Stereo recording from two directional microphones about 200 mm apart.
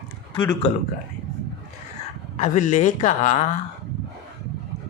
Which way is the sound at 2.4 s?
35° left (ahead or behind).